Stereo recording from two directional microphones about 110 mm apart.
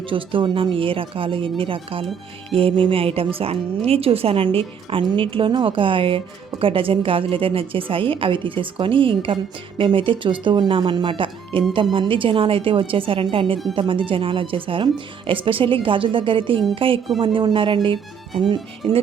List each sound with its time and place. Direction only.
0.1 s a woman's voice: 50° right (ahead or behind)